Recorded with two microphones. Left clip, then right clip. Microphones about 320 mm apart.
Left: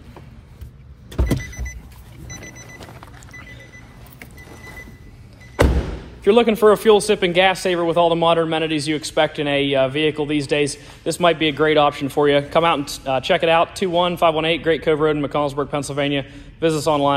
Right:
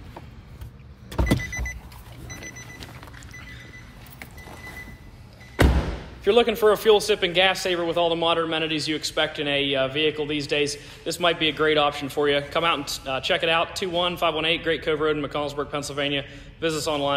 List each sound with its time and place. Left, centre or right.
6.2 s a man's voice: centre